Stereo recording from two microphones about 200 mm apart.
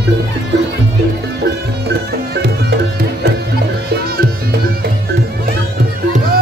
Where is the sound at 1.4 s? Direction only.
55° right (ahead or behind).